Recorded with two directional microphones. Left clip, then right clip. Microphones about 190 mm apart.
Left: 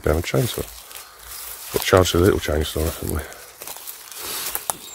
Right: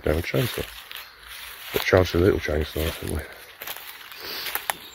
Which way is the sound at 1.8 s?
20° left (ahead or behind).